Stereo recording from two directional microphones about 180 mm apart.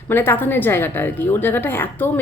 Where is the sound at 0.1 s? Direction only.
10° left (ahead or behind).